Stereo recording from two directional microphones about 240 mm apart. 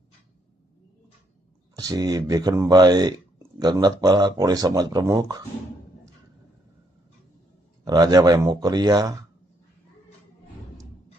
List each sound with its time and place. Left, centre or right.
1.7 s speech: centre
7.9 s speech: centre